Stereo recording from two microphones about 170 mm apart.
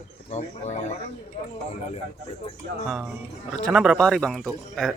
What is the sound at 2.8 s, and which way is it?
A man's voice, centre (ahead or behind).